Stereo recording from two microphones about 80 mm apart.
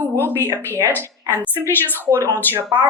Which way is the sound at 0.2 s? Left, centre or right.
Left.